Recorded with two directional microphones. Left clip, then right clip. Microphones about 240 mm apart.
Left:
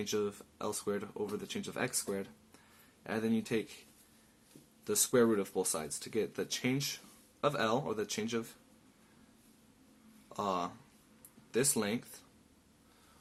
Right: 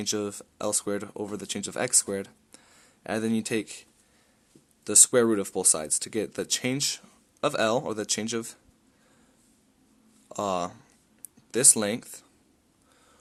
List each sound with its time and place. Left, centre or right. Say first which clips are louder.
0.0 s speech: right 5 dB; right
4.8 s speech: right 8 dB; right
10.2 s speech: right 7 dB; right